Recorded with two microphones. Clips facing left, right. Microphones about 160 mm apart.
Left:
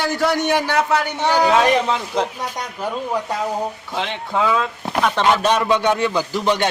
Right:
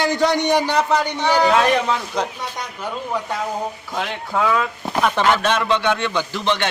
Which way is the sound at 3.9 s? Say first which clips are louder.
Left 1 dB; 5° right (ahead or behind).